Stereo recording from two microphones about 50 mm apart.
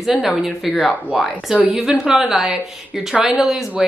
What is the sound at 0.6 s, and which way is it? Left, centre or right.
A woman's voice, centre.